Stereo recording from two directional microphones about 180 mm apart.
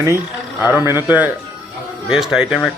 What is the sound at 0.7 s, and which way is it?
Speech, 15° right (ahead or behind).